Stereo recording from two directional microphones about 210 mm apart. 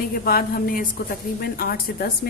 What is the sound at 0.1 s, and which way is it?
A woman's voice, 45° left (ahead or behind).